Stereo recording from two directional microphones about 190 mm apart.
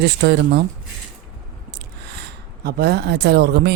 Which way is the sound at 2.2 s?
60° right (ahead or behind).